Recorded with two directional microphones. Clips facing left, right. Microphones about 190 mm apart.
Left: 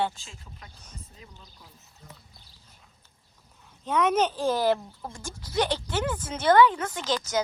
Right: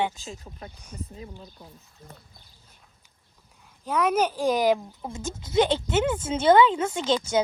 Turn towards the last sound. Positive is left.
turn(degrees=-25)  # may be behind; listen again after turning